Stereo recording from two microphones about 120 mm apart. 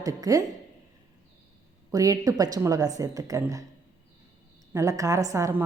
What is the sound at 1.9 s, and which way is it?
A woman's voice, 30° right (ahead or behind).